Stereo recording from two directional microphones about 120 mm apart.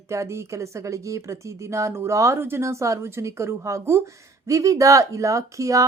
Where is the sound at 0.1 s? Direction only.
25° right (ahead or behind).